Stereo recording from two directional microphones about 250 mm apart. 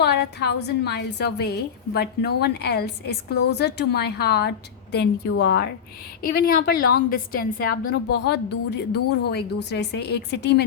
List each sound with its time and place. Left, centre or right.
0.0 s a woman's voice: left